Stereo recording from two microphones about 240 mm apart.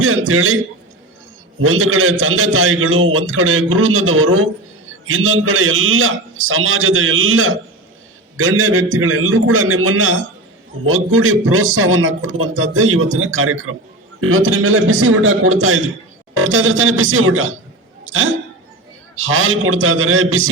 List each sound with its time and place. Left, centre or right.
0.0 s a man's voice: right
1.6 s a man's voice: right
18.0 s hiccup: right
19.1 s a man's voice: right